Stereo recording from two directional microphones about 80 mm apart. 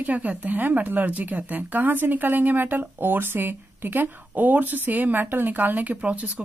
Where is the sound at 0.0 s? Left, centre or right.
Centre.